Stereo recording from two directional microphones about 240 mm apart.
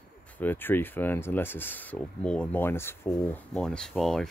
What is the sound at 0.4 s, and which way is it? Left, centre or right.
Speech, centre.